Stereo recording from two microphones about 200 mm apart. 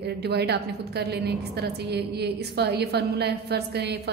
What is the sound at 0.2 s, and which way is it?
A woman's voice, 55° right (ahead or behind).